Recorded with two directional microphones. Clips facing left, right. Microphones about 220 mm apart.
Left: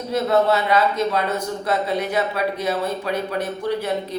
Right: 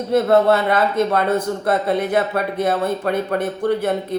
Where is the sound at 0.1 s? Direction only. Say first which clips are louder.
Right 4 dB; 55° right (ahead or behind).